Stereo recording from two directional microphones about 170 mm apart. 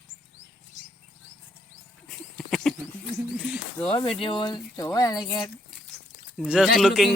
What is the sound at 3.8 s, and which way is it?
Speech, 35° left (ahead or behind).